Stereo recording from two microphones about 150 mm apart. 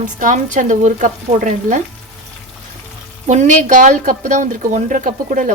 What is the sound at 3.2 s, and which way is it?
A woman's voice, 55° right (ahead or behind).